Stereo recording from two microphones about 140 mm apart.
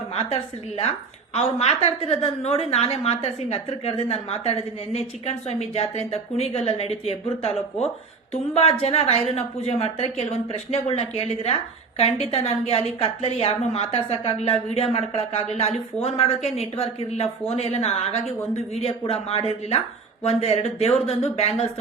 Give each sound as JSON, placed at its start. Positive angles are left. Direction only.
{"t": 1.3, "sound": "a woman's voice", "side_deg": 50}